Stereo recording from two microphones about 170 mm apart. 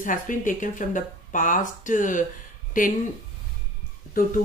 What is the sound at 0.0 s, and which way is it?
Speech, 50° left (ahead or behind).